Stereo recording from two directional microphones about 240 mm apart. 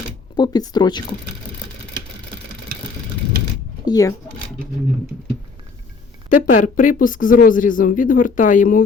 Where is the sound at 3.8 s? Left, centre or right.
Centre.